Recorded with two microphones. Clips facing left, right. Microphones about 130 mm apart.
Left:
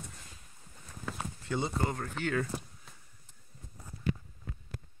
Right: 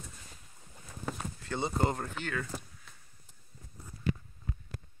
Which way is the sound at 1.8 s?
25° right (ahead or behind).